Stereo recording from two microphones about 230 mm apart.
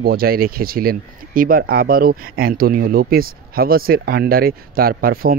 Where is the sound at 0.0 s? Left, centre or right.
Right.